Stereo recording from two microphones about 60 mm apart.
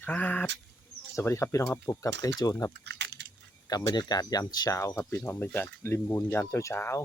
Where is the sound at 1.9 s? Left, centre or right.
Left.